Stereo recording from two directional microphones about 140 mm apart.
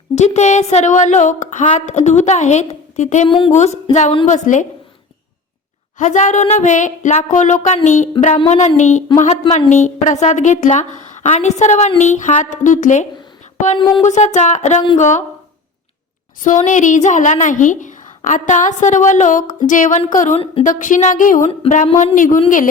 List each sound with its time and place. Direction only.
0.2 s a woman's voice: 55° left (ahead or behind)
3.2 s a woman's voice: 35° left (ahead or behind)
3.5 s a woman's voice: 55° left (ahead or behind)
6.0 s a woman's voice: 60° left (ahead or behind)
13.7 s a woman's voice: 35° left (ahead or behind)
14.0 s a woman's voice: 55° left (ahead or behind)
16.4 s a woman's voice: 65° left (ahead or behind)
20.3 s a woman's voice: 45° left (ahead or behind)
20.7 s a woman's voice: 70° left (ahead or behind)
21.8 s a woman's voice: 55° left (ahead or behind)